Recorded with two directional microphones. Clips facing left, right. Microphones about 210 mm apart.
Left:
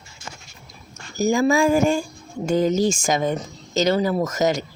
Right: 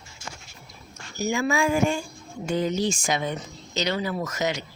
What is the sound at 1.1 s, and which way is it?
Speech, 40° left (ahead or behind).